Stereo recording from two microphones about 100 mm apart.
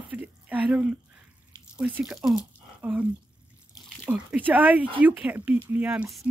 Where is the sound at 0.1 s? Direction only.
15° right (ahead or behind).